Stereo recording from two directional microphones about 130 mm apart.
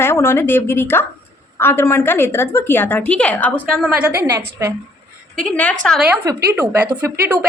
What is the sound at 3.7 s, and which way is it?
Speech, 5° right (ahead or behind).